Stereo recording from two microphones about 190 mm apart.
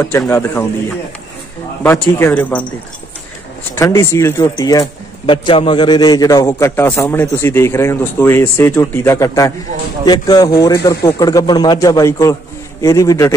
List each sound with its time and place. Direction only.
0.3 s speech: 15° left (ahead or behind)
1.8 s speech: 10° left (ahead or behind)
3.7 s a man's voice: 15° left (ahead or behind)